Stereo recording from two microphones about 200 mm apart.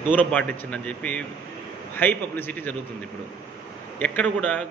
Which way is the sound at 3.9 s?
5° left (ahead or behind).